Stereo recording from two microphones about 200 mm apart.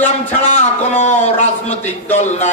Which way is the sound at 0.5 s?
35° left (ahead or behind).